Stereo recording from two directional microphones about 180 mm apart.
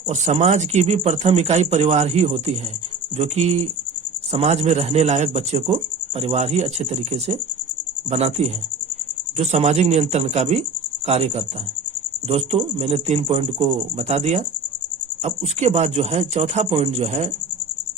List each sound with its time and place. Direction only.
0.1 s speech: 35° right (ahead or behind)